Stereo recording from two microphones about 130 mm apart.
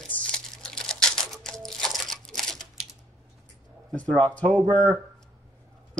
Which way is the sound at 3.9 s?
5° left (ahead or behind).